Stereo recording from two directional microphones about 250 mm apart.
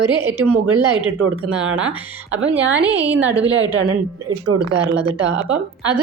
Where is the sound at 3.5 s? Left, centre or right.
Right.